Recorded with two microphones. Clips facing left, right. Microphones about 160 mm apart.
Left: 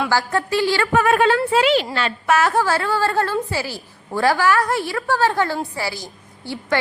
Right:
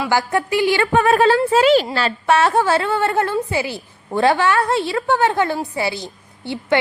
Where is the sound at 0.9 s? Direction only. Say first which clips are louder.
Right 2 dB; 35° right (ahead or behind).